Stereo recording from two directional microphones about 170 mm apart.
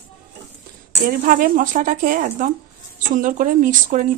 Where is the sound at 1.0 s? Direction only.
55° right (ahead or behind).